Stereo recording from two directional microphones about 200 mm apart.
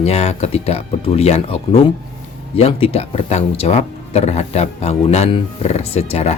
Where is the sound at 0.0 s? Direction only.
30° left (ahead or behind).